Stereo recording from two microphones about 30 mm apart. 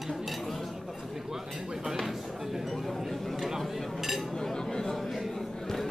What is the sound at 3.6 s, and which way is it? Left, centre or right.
Dishes, centre.